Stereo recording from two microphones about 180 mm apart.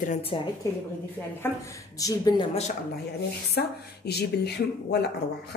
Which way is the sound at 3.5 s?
65° left (ahead or behind).